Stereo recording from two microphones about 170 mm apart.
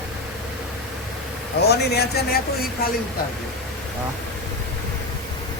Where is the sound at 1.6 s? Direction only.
70° left (ahead or behind).